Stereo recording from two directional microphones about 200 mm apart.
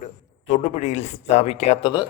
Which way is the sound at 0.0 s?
40° left (ahead or behind).